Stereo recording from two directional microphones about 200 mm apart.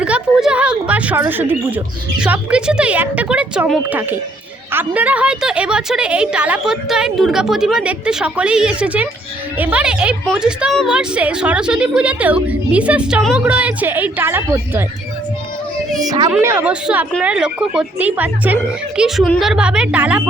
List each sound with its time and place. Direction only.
0.0 s a woman's voice: 5° right (ahead or behind)
16.0 s a woman's voice: 20° right (ahead or behind); by 20.2 s 5° right (ahead or behind)